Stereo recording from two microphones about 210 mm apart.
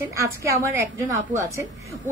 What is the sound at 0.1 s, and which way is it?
A woman's voice, 15° right (ahead or behind).